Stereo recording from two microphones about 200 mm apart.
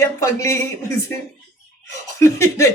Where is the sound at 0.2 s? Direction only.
15° left (ahead or behind).